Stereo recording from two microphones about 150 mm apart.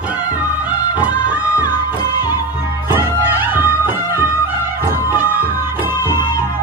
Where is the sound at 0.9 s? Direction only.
10° right (ahead or behind).